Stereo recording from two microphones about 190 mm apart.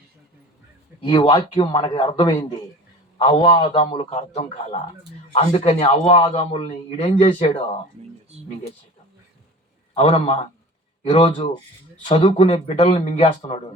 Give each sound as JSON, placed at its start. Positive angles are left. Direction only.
{"t": 1.0, "sound": "a man's voice", "side_deg": 25}
{"t": 9.9, "sound": "a man's voice", "side_deg": 30}